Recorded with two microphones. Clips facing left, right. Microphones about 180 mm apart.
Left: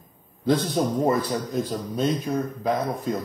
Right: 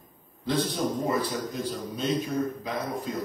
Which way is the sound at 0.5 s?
45° left (ahead or behind).